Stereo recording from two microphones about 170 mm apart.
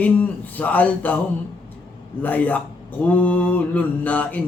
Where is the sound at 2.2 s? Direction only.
10° left (ahead or behind).